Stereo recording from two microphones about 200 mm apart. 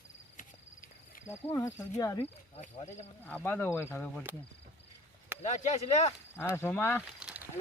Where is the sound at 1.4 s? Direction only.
10° left (ahead or behind).